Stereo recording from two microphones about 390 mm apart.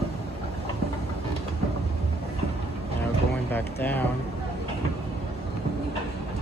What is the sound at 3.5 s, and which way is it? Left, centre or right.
Speech, centre.